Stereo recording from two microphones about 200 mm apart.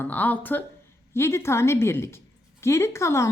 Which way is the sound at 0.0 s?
10° left (ahead or behind).